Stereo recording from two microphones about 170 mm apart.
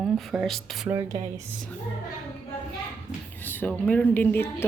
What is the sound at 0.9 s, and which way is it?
Speech, 15° right (ahead or behind).